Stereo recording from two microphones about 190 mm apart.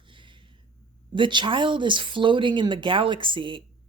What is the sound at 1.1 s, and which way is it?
Speech, 25° right (ahead or behind).